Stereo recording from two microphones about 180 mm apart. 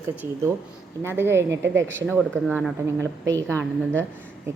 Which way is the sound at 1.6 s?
90° right.